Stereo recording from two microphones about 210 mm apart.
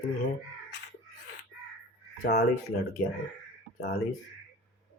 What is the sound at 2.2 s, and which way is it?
Speech, 50° left (ahead or behind).